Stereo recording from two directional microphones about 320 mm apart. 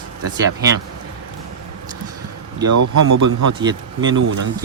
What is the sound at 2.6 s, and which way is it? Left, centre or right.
Speech, right.